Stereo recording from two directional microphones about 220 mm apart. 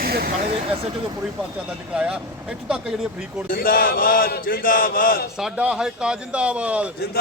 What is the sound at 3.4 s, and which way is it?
A man's voice, 40° left (ahead or behind).